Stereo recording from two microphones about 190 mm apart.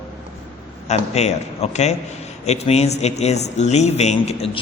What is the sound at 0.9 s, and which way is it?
A man's voice, 35° left (ahead or behind).